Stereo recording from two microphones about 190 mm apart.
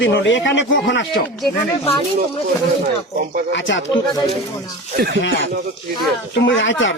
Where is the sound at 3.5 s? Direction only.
75° left (ahead or behind).